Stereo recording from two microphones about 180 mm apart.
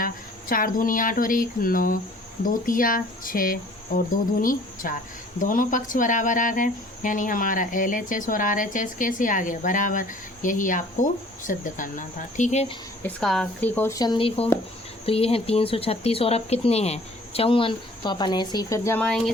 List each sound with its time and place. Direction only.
0.0 s speech: 50° left (ahead or behind)
13.0 s speech: 5° left (ahead or behind)